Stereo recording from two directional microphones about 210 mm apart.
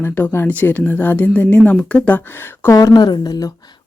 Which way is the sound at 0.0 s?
10° left (ahead or behind).